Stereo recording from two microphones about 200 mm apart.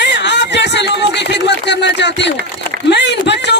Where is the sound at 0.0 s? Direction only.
60° left (ahead or behind).